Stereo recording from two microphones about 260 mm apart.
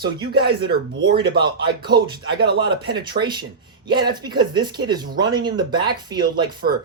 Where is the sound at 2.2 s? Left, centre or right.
Right.